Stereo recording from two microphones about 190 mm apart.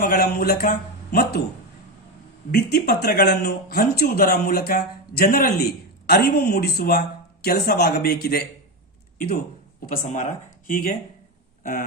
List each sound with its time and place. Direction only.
0.0 s speech: 50° left (ahead or behind)
2.5 s speech: 60° left (ahead or behind)
9.8 s speech: 45° left (ahead or behind)